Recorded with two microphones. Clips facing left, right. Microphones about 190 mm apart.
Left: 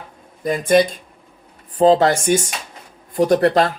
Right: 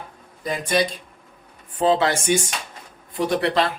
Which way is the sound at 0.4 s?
50° left (ahead or behind).